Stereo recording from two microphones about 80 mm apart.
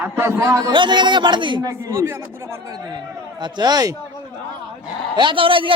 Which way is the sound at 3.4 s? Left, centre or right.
Right.